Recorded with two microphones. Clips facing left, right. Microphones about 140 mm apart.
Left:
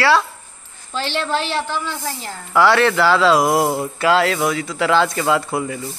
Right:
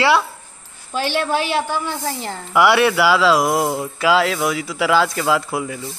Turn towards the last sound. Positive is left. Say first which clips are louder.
# left 1 dB
turn(degrees=0)  # may be behind; listen again after turning